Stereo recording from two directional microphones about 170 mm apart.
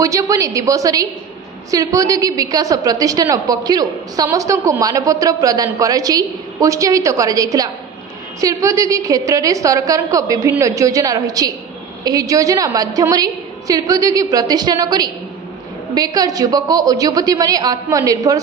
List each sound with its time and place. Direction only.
0.0 s a woman's voice: 20° right (ahead or behind)